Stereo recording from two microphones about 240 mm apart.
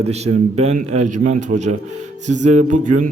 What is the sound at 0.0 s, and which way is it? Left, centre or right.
A man's voice, right.